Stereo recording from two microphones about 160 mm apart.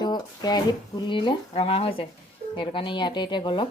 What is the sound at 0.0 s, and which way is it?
Speech, 25° left (ahead or behind).